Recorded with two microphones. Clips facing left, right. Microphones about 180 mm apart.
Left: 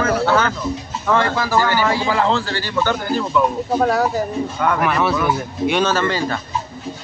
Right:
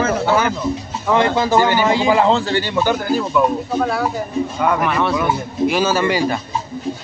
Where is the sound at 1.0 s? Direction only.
20° right (ahead or behind).